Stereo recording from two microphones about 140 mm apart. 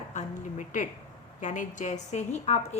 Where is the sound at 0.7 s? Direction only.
65° left (ahead or behind).